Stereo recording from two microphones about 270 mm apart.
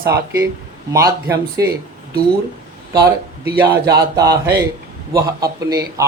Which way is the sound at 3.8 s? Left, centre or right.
Centre.